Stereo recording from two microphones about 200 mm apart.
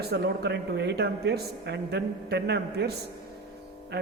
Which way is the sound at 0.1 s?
60° right (ahead or behind).